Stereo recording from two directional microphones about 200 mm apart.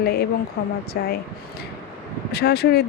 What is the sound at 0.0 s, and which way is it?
Speech, 50° left (ahead or behind).